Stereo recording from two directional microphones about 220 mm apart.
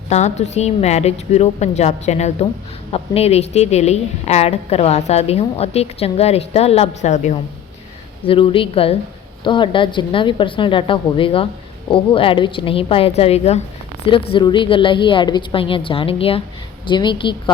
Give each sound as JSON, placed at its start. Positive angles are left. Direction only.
{"t": 0.1, "sound": "a woman's voice", "side_deg": 30}